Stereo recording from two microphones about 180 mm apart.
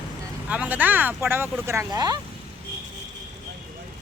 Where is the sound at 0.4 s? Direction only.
10° right (ahead or behind).